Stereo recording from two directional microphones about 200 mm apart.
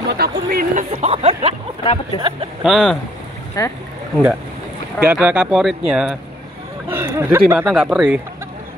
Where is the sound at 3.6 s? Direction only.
15° left (ahead or behind).